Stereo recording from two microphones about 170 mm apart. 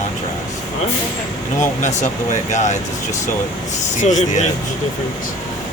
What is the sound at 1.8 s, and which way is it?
Speech, 45° left (ahead or behind).